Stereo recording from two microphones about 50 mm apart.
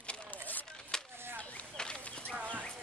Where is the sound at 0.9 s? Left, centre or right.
Centre.